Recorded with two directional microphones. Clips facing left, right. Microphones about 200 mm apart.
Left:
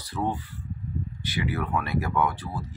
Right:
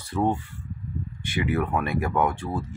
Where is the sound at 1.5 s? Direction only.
50° right (ahead or behind).